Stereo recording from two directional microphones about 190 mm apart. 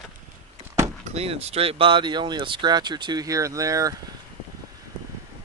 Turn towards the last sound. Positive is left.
turn(degrees=-15)  # may be behind; listen again after turning